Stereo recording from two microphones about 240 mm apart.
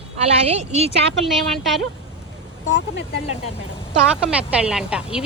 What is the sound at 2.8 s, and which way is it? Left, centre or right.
Speech, left.